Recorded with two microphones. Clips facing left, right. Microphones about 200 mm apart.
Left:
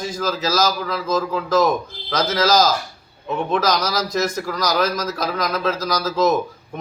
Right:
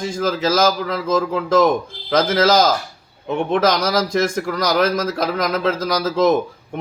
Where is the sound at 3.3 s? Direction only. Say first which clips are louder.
Right 3 dB; 25° right (ahead or behind).